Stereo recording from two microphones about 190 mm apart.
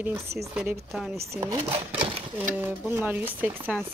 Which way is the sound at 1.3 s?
15° right (ahead or behind).